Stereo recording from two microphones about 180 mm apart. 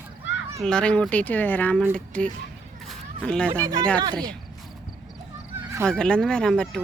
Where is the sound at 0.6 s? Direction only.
5° left (ahead or behind).